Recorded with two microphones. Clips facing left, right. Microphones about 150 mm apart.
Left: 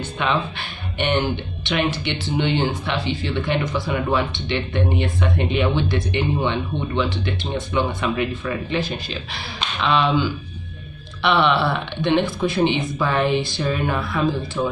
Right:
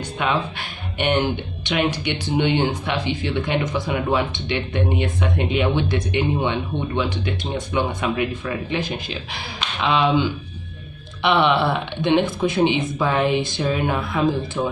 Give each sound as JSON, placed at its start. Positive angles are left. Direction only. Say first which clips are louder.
{"t": 0.3, "sound": "speech", "louder": "left 1 dB", "side_deg": -10}